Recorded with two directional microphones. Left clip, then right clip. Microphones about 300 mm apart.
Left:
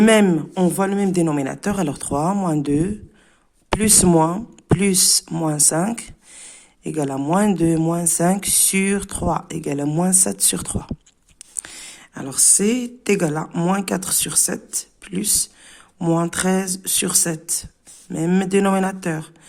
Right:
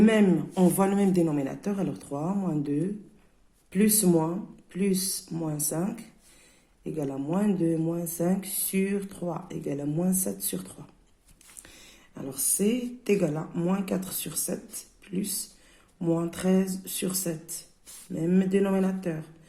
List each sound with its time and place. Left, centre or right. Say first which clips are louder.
0.0 s speech: left 8 dB; left
12.1 s speech: left 13 dB; left